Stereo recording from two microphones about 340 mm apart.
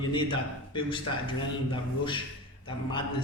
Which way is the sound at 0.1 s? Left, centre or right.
Centre.